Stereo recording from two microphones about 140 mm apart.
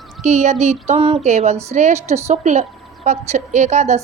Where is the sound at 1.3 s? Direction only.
55° right (ahead or behind).